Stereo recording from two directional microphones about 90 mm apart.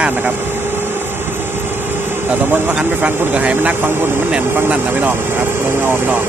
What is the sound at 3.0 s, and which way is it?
Speech, 15° right (ahead or behind).